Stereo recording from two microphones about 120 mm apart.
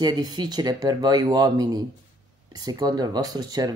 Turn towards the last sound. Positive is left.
turn(degrees=-30)  # may be behind; listen again after turning